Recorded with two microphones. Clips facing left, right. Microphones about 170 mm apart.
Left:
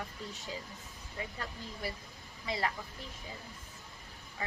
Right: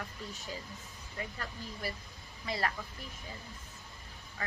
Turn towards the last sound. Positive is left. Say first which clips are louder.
# left 1 dB
turn(degrees=20)  # may be behind; listen again after turning